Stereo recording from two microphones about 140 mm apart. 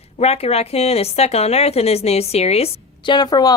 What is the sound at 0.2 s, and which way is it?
A woman's voice, 50° left (ahead or behind).